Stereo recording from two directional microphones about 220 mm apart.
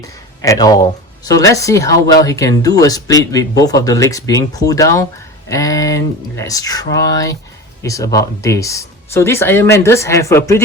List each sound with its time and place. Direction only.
0.0 s speech: 15° left (ahead or behind)